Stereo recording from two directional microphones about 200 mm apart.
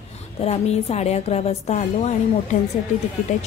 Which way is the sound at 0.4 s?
30° left (ahead or behind).